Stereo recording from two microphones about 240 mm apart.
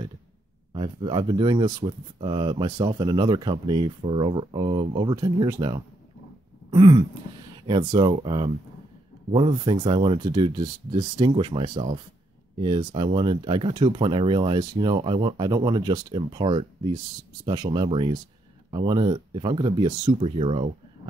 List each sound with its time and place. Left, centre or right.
0.7 s speech: centre